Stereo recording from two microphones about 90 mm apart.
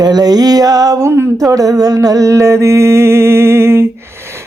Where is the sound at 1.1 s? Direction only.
35° right (ahead or behind).